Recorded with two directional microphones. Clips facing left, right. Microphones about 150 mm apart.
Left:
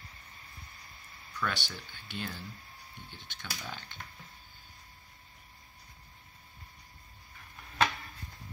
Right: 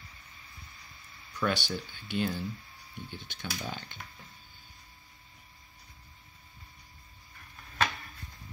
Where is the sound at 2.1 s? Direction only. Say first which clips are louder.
Right 9 dB; 15° right (ahead or behind).